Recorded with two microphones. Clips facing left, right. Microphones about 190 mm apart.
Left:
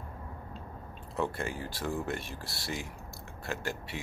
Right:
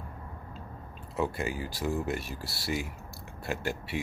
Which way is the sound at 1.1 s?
5° right (ahead or behind).